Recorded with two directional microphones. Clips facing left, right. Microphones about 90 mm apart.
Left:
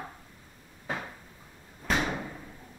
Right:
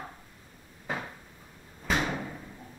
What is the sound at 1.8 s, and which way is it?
Slam, centre (ahead or behind).